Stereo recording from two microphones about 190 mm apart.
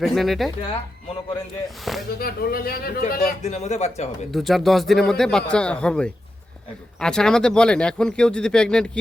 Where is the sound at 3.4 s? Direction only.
35° left (ahead or behind).